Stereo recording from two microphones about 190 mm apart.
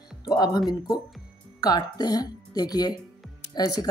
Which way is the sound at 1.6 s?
20° left (ahead or behind).